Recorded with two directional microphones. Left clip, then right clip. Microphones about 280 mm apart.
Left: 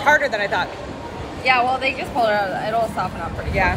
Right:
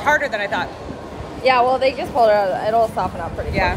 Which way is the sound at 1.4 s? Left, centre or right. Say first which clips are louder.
Right 3 dB; right.